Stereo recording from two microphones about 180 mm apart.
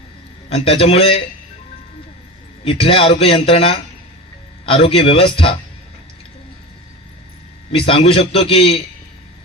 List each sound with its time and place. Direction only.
0.5 s speech: 35° left (ahead or behind)
2.6 s speech: 30° left (ahead or behind)
7.8 s speech: 30° left (ahead or behind)